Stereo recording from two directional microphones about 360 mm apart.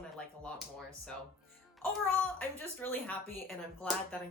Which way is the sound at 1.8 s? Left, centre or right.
Centre.